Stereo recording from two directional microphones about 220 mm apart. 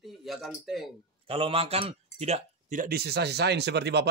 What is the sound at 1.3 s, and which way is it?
A man's voice, 25° right (ahead or behind).